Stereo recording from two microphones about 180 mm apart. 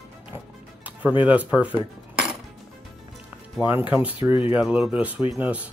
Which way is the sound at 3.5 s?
10° right (ahead or behind).